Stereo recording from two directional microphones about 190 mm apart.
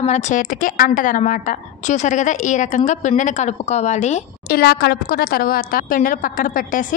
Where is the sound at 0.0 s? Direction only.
35° left (ahead or behind).